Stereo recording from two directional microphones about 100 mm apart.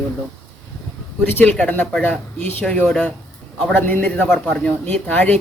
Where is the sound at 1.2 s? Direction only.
20° left (ahead or behind).